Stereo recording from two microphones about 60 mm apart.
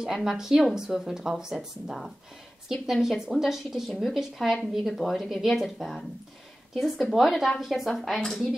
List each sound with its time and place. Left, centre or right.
0.0 s a woman's voice: centre